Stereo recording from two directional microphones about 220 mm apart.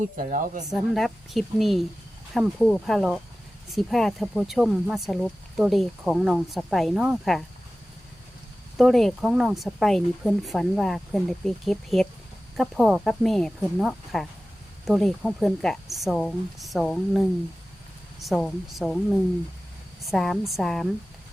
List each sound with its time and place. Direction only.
0.2 s speech: 35° right (ahead or behind)
0.7 s speech: centre (ahead or behind)
8.8 s speech: centre (ahead or behind)
20.1 s speech: centre (ahead or behind)